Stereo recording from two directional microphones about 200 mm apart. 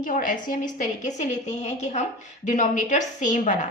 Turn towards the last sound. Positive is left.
turn(degrees=40)  # may be behind; listen again after turning